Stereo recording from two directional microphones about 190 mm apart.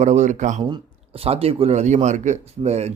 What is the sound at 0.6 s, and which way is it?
A man's voice, 25° right (ahead or behind).